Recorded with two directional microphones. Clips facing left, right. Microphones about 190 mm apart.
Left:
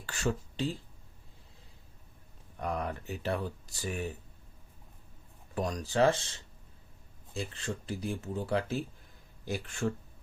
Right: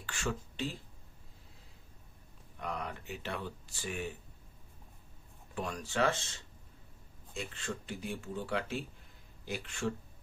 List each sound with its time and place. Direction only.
0.0 s speech: 40° left (ahead or behind)
2.6 s speech: 45° left (ahead or behind)
5.5 s speech: 40° left (ahead or behind)
7.3 s speech: 35° left (ahead or behind)